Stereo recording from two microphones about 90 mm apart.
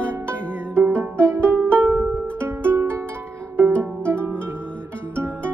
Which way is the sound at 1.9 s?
20° right (ahead or behind).